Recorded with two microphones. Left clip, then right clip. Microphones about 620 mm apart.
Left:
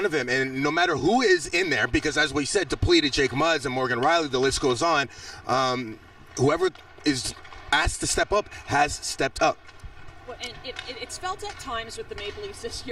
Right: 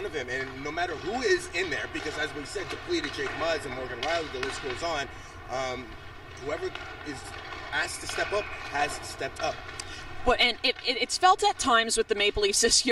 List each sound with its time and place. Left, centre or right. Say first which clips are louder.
0.0 s a man's voice: left 8 dB; left
10.2 s speech: right 13 dB; right